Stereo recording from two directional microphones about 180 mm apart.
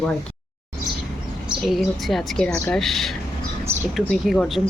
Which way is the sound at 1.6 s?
Centre (ahead or behind).